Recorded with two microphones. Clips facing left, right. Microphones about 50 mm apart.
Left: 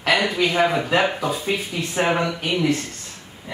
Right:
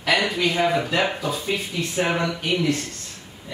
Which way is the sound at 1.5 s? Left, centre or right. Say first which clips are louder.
Left 1 dB; left.